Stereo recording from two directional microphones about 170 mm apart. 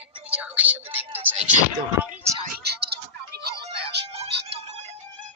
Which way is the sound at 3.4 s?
80° right.